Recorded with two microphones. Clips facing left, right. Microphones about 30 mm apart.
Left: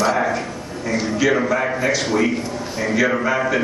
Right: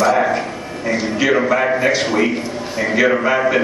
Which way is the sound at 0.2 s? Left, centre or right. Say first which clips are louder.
Right 4 dB; right.